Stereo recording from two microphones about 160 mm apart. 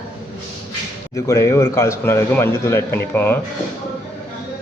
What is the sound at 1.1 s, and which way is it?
A man's voice, 20° left (ahead or behind).